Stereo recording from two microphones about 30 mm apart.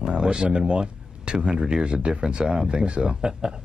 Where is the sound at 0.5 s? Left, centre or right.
Right.